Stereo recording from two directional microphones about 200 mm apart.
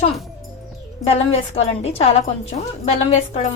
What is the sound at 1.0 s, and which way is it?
Speech, 30° left (ahead or behind).